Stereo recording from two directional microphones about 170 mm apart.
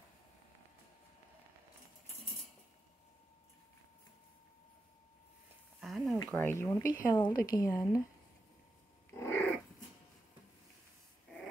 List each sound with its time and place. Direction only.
5.8 s a sound: centre (ahead or behind)
6.3 s speech: 15° left (ahead or behind)
9.1 s dog: 15° left (ahead or behind)